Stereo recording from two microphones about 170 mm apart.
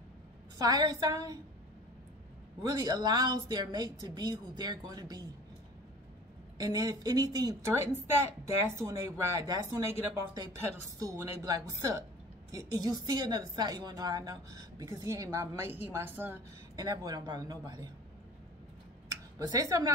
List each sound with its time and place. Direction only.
0.6 s a woman's voice: 20° right (ahead or behind)
2.6 s a woman's voice: 20° right (ahead or behind)
6.6 s a woman's voice: 20° right (ahead or behind)
19.3 s a woman's voice: 20° right (ahead or behind)